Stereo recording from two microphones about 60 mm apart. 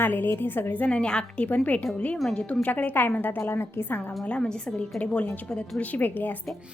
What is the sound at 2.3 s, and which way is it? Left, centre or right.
Speech, centre.